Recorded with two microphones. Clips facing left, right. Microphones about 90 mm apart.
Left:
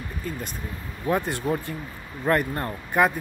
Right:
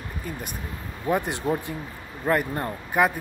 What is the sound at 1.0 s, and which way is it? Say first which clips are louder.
Speech: even; 15° right (ahead or behind).